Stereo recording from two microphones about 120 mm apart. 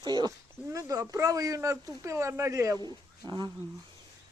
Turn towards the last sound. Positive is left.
turn(degrees=-35)  # may be behind; listen again after turning